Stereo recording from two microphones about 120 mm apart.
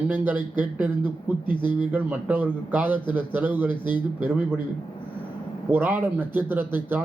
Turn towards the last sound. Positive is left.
turn(degrees=-15)  # may be behind; listen again after turning